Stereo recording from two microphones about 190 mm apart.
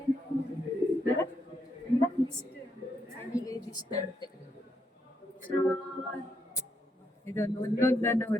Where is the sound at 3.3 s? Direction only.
20° left (ahead or behind).